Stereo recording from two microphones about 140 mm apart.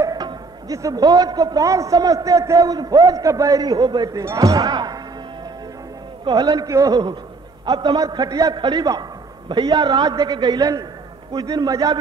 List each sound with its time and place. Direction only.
0.0 s a man's voice: 30° right (ahead or behind)
6.2 s a man's voice: 25° right (ahead or behind)